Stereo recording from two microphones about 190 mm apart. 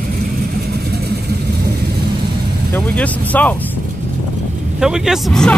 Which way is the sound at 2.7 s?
10° left (ahead or behind).